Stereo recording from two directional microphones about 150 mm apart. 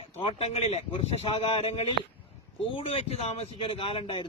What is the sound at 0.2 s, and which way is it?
A man's voice, 45° left (ahead or behind).